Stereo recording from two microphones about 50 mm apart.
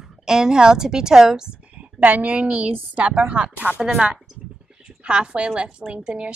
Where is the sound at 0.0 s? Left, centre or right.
Centre.